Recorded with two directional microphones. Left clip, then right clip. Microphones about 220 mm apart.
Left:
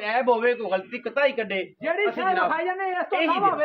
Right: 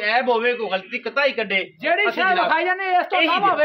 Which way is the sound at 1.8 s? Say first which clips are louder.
Right 5 dB; 50° right (ahead or behind).